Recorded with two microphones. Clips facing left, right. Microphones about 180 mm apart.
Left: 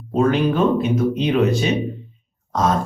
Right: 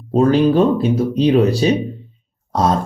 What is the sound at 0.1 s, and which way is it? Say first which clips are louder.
Speech: right 5 dB; 35° right (ahead or behind).